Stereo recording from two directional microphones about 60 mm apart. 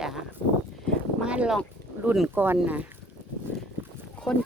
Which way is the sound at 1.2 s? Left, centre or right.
Centre.